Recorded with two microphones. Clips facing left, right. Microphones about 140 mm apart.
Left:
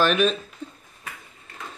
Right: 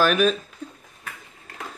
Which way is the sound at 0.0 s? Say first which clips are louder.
Right 1 dB; 5° right (ahead or behind).